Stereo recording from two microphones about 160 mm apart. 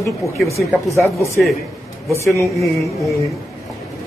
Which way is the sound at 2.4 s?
Centre (ahead or behind).